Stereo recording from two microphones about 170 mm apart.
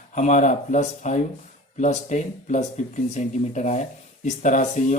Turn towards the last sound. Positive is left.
turn(degrees=45)  # may be behind; listen again after turning